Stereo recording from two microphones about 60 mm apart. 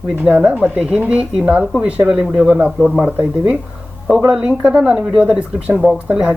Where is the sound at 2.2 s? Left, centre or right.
Centre.